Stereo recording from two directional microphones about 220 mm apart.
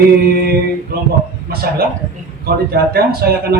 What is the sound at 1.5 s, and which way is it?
A man's voice, 45° right (ahead or behind).